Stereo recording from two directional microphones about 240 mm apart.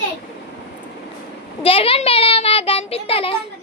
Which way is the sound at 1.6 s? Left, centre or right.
Left.